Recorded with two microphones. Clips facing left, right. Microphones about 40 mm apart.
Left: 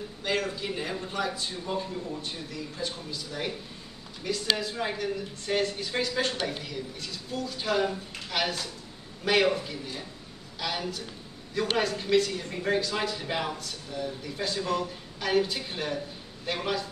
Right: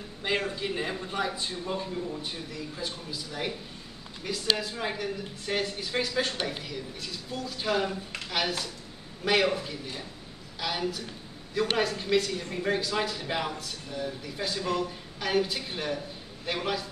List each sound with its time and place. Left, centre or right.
0.2 s a man's voice: centre
2.2 s a woman's voice: centre